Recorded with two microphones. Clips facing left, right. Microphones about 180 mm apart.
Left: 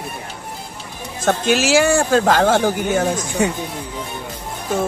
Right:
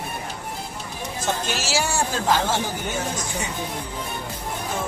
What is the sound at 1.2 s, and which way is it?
Speech, 75° left (ahead or behind).